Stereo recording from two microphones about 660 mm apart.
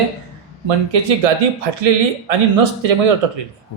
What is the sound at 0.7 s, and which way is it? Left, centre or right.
A man's voice, right.